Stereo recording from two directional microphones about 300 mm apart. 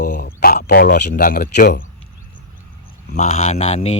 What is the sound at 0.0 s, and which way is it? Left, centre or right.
Speech, left.